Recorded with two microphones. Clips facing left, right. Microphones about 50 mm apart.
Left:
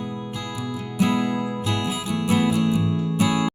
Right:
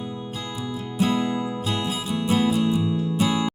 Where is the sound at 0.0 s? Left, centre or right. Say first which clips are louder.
Left 1 dB; left.